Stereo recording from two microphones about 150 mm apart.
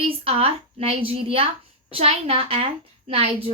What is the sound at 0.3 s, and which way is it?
A woman's voice, 40° right (ahead or behind).